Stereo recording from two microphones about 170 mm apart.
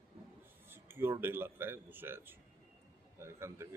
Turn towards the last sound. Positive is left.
turn(degrees=-15)  # may be behind; listen again after turning